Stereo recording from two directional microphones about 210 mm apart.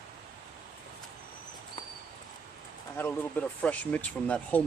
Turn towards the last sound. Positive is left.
turn(degrees=5)  # may be behind; listen again after turning